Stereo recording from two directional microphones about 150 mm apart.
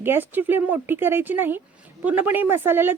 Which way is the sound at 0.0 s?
15° right (ahead or behind).